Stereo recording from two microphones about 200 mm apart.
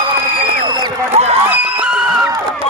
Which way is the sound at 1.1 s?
35° right (ahead or behind).